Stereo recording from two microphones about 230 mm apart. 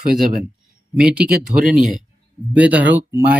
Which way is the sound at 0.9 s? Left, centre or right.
Centre.